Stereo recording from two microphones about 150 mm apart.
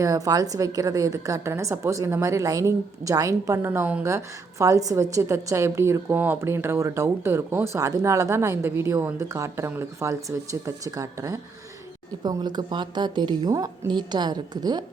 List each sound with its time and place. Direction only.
0.0 s a woman's voice: 25° right (ahead or behind)